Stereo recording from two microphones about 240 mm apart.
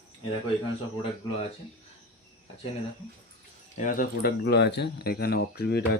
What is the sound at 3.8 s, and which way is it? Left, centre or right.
Speech, left.